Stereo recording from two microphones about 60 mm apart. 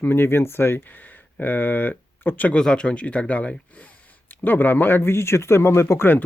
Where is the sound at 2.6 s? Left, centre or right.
Centre; by 6.1 s left.